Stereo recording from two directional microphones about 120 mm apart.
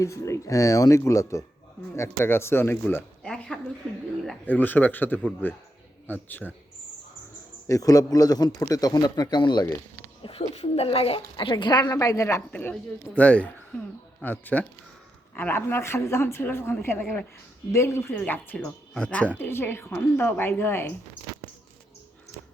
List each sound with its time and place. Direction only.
0.0 s a woman's voice: 25° left (ahead or behind)
3.2 s a sound: 5° left (ahead or behind)
4.4 s speech: 15° left (ahead or behind)
7.7 s a man's voice: 30° left (ahead or behind)
10.5 s a man's voice: 60° left (ahead or behind); by 12.4 s 25° left (ahead or behind)
12.5 s a woman's voice: 15° left (ahead or behind)